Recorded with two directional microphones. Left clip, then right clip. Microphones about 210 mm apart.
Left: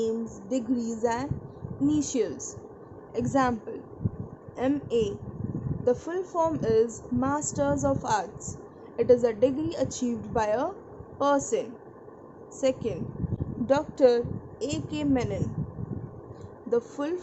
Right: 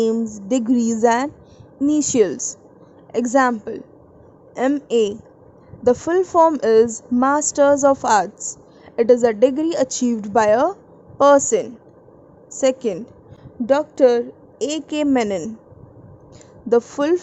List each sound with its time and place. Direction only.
0.3 s speech: 40° right (ahead or behind)
16.6 s speech: 35° right (ahead or behind)